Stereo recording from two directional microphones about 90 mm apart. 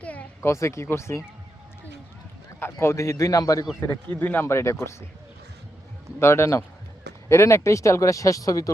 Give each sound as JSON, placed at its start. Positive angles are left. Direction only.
{"t": 0.0, "sound": "a sound", "side_deg": 15}
{"t": 0.4, "sound": "speech", "side_deg": 35}
{"t": 2.7, "sound": "speech", "side_deg": 35}
{"t": 3.8, "sound": "speech", "side_deg": 20}
{"t": 4.4, "sound": "speech", "side_deg": 30}
{"t": 6.1, "sound": "speech", "side_deg": 30}